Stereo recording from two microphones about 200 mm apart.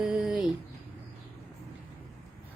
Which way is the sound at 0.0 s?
5° right (ahead or behind).